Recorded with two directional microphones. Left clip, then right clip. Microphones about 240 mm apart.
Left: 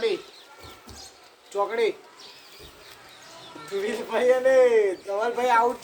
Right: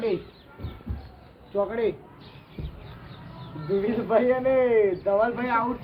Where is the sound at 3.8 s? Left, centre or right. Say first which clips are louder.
Right 3 dB; left.